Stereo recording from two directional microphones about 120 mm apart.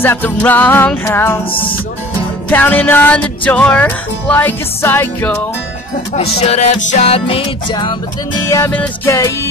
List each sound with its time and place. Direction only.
0.0 s music: 15° left (ahead or behind)
2.5 s music: 15° left (ahead or behind)
6.1 s music: 60° left (ahead or behind)
8.5 s music: 25° left (ahead or behind)